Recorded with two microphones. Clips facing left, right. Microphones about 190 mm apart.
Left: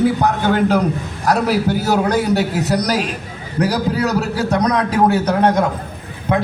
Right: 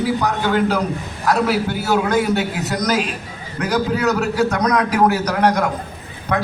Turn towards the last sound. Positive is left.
turn(degrees=25)  # may be behind; listen again after turning